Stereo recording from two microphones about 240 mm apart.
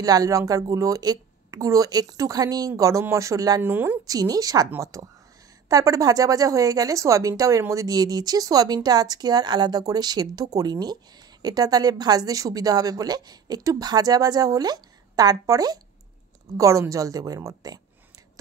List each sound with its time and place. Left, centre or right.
0.0 s speech: centre